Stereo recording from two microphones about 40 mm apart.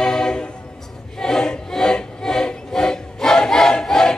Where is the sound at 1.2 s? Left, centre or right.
Centre.